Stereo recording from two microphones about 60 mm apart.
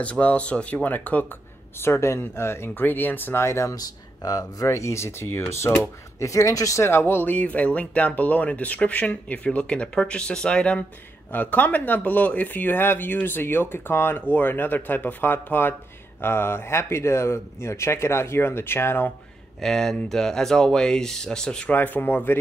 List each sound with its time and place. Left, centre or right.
0.0 s speech: left
1.8 s speech: left
3.4 s speech: left
3.7 s speech: left
4.6 s speech: left
6.8 s speech: left
7.3 s speech: left
11.3 s speech: left
19.6 s speech: centre
21.6 s speech: left